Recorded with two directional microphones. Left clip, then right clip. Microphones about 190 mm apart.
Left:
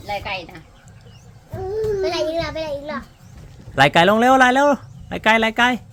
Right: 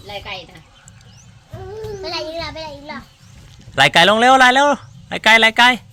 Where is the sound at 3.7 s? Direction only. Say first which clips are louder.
Right 2 dB; 10° left (ahead or behind).